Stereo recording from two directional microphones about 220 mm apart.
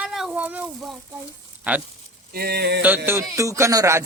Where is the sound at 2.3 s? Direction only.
45° right (ahead or behind).